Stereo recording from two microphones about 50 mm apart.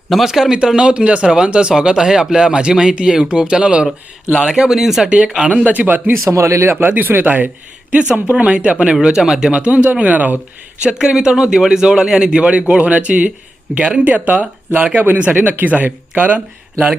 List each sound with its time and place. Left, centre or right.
0.1 s a man's voice: centre
5.0 s speech: right
5.6 s speech: right
6.2 s speech: right
6.7 s speech: right
7.9 s speech: right
10.8 s a man's voice: centre; by 16.9 s right